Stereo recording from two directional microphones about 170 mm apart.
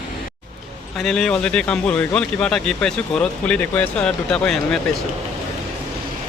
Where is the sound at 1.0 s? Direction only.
5° left (ahead or behind).